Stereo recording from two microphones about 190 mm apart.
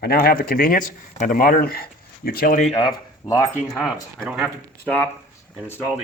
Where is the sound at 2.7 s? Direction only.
20° left (ahead or behind).